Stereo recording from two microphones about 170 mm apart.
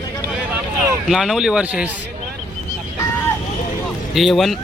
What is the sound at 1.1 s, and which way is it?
Speech, centre (ahead or behind).